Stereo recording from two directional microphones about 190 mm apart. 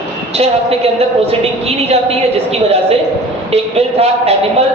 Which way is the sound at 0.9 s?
30° right (ahead or behind).